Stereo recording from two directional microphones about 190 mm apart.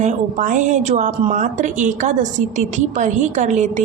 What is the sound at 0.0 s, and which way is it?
A woman's voice, 40° right (ahead or behind).